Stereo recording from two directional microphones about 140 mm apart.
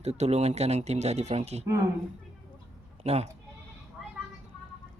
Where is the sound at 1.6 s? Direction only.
25° right (ahead or behind).